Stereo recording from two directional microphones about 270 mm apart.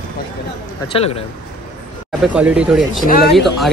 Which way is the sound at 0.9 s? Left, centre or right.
Left.